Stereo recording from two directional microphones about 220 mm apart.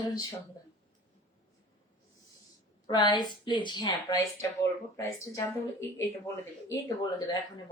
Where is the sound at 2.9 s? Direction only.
20° left (ahead or behind).